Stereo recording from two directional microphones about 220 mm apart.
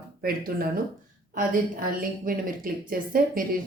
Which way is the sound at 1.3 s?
40° right (ahead or behind).